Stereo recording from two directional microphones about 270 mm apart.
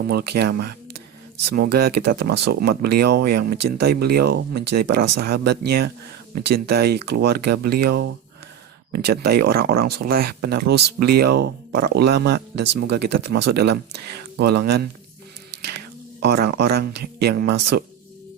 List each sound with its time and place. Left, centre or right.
0.1 s speech: right
16.2 s speech: right